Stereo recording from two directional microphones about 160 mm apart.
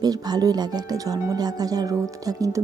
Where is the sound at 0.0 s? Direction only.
25° right (ahead or behind).